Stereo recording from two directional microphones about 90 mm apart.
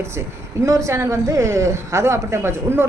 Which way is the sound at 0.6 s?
35° right (ahead or behind).